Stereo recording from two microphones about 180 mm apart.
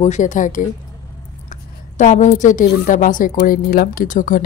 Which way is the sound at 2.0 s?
40° left (ahead or behind).